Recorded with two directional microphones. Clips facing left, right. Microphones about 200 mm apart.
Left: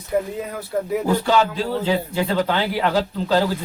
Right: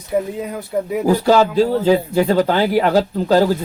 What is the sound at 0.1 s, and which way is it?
Speech, 20° right (ahead or behind).